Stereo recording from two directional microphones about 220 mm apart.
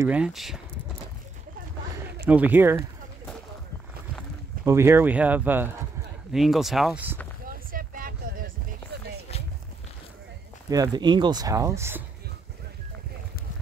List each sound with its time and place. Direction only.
0.0 s speech: 5° right (ahead or behind)
2.2 s speech: 5° right (ahead or behind)
4.6 s speech: 10° right (ahead or behind)
7.7 s vehicle: 40° right (ahead or behind)
10.7 s speech: 20° right (ahead or behind)